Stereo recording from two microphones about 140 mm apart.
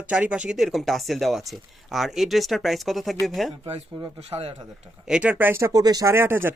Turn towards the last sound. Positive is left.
turn(degrees=-15)  # may be behind; listen again after turning